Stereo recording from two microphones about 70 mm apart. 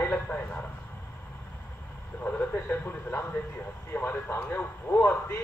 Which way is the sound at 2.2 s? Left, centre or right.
Centre.